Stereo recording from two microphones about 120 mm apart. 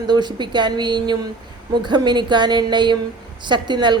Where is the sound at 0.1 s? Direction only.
35° right (ahead or behind).